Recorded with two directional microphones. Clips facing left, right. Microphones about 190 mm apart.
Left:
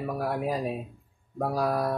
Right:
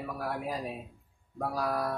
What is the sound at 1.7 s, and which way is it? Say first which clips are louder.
Mantra: left 5 dB; 30° left (ahead or behind).